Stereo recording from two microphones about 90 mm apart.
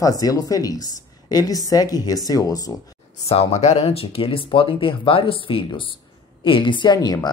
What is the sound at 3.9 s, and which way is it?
A woman's voice, 90° left.